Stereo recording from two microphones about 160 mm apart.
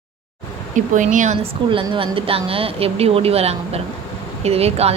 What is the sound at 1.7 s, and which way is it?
A woman's voice, 35° right (ahead or behind).